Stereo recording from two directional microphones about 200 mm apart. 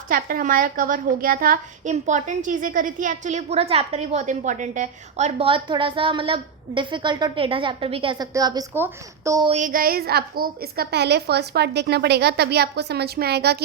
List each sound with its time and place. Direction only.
0.1 s a woman's voice: 45° right (ahead or behind); by 9.5 s 15° right (ahead or behind)
9.5 s a woman's voice: 40° right (ahead or behind)